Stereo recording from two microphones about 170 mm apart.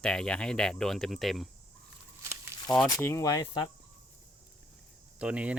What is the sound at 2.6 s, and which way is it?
Speech, 5° left (ahead or behind).